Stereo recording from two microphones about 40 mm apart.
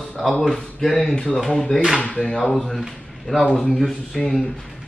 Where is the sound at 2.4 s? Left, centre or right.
Centre.